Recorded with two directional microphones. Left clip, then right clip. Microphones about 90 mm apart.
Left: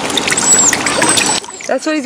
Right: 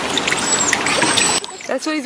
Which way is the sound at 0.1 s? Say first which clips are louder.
Left 4 dB; 40° left (ahead or behind).